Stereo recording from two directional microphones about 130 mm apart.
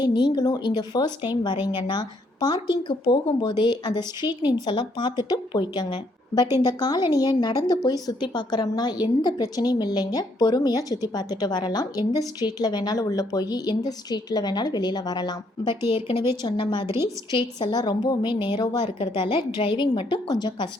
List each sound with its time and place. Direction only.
0.0 s a woman's voice: 35° left (ahead or behind)
15.9 s a woman's voice: 45° left (ahead or behind)
16.8 s a woman's voice: 20° right (ahead or behind)
17.3 s a woman's voice: 35° left (ahead or behind)